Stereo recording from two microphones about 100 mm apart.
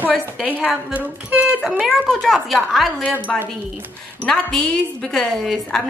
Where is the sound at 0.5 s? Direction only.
15° right (ahead or behind).